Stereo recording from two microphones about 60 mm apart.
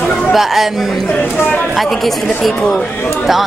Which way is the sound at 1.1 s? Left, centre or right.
Left.